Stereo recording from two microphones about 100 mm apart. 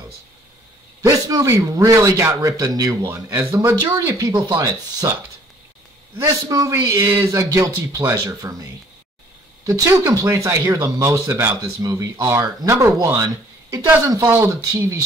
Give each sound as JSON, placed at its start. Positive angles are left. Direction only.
{"t": 1.0, "sound": "a man's voice", "side_deg": -30}
{"t": 6.1, "sound": "a man's voice", "side_deg": -30}
{"t": 9.7, "sound": "a man's voice", "side_deg": -30}
{"t": 11.8, "sound": "a man's voice", "side_deg": -35}
{"t": 14.2, "sound": "speech", "side_deg": -25}